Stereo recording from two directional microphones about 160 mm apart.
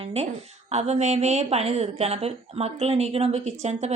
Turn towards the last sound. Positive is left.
turn(degrees=-45)  # may be behind; listen again after turning